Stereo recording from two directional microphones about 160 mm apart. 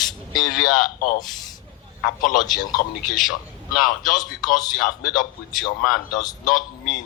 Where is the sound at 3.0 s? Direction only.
Centre (ahead or behind).